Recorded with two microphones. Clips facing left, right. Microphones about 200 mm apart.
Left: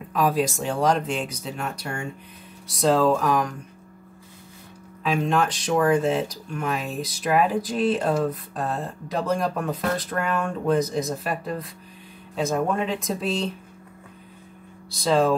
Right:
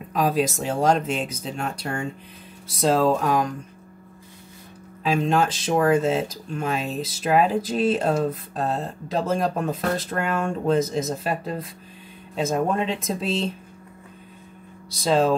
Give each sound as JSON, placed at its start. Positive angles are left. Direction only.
{"t": 0.1, "sound": "speech", "side_deg": -20}
{"t": 5.0, "sound": "speech", "side_deg": -25}
{"t": 15.0, "sound": "speech", "side_deg": -25}